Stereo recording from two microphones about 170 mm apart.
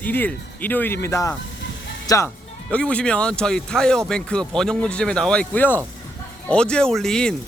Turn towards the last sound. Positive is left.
turn(degrees=5)  # may be behind; listen again after turning